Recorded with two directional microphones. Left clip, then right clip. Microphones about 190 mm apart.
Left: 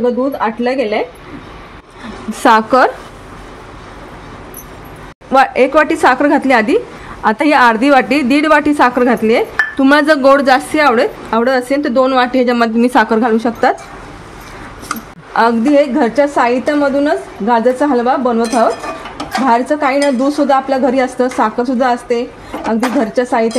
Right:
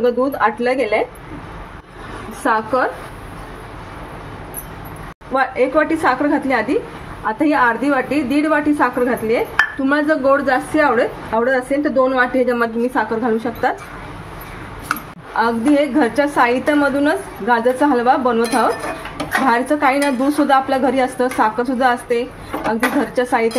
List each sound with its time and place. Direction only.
0.4 s speech: 40° left (ahead or behind)
2.4 s a woman's voice: 65° left (ahead or behind)
5.3 s a woman's voice: 60° left (ahead or behind)
15.3 s a woman's voice: 50° left (ahead or behind)